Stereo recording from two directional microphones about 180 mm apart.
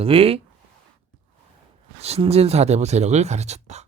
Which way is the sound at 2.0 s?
35° right (ahead or behind).